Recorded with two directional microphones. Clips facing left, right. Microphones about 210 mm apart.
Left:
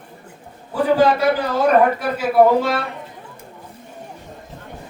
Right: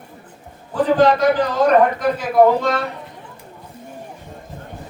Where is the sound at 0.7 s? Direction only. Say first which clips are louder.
Right 1 dB; 10° left (ahead or behind).